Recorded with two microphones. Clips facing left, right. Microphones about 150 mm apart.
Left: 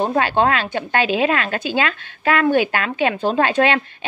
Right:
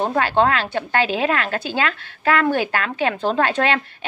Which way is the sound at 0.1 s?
15° left (ahead or behind).